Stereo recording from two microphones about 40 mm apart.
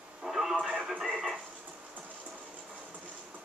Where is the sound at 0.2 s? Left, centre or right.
Centre.